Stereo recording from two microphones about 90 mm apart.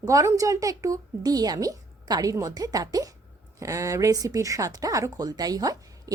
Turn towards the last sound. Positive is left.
turn(degrees=-45)  # may be behind; listen again after turning